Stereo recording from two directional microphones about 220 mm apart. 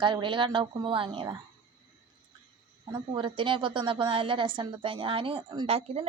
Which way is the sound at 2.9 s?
20° right (ahead or behind).